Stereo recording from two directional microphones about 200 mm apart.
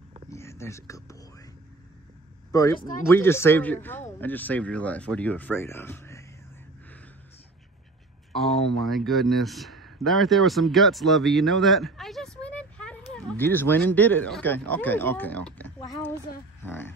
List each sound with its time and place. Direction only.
0.3 s whispering: 15° left (ahead or behind)
2.5 s speech: 15° left (ahead or behind)
8.3 s a woman's voice: centre (ahead or behind)